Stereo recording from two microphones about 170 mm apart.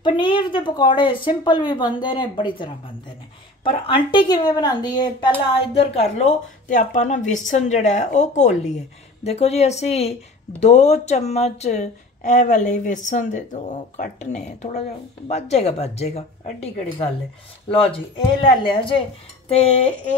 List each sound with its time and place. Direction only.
0.0 s speech: 30° left (ahead or behind)
5.6 s speech: 35° left (ahead or behind)